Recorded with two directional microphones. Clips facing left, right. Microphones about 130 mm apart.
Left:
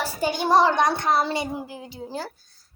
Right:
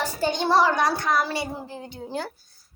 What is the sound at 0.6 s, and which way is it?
A woman's voice, 20° left (ahead or behind).